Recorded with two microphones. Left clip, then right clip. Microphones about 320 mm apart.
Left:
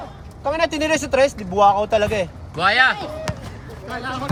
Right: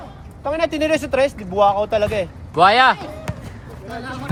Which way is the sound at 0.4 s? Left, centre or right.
Left.